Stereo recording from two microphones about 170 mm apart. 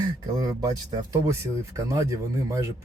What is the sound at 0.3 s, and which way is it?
Speech, 25° right (ahead or behind).